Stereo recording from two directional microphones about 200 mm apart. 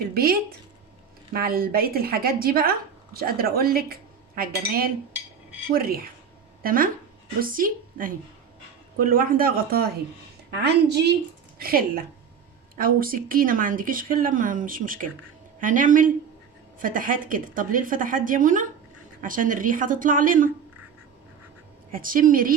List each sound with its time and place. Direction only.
0.1 s a woman's voice: 50° right (ahead or behind)
21.8 s speech: 45° right (ahead or behind)